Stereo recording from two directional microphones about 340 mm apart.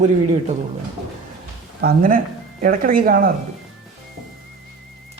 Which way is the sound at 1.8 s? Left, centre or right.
Right.